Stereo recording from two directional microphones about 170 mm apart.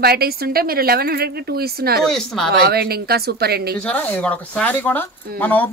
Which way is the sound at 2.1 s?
5° left (ahead or behind).